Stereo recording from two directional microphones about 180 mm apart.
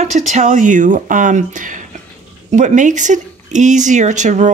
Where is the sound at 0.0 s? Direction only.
40° right (ahead or behind).